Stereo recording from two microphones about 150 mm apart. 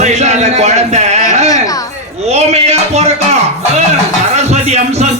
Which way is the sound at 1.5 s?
25° left (ahead or behind).